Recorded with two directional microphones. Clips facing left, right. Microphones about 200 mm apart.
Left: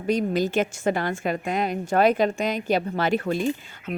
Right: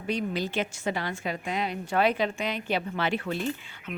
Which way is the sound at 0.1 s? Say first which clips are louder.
Left 7 dB; 45° left (ahead or behind).